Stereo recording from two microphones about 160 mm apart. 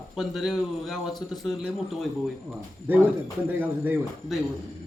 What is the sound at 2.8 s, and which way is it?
Speech, 10° right (ahead or behind).